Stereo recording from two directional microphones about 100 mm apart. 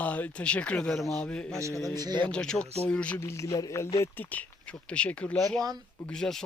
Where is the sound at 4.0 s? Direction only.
20° left (ahead or behind).